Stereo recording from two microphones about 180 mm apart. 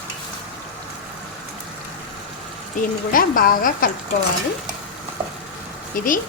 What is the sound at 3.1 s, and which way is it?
Speech, 50° left (ahead or behind).